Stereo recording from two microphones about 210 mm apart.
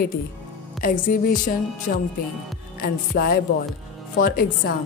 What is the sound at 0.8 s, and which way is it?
Speech, 40° left (ahead or behind).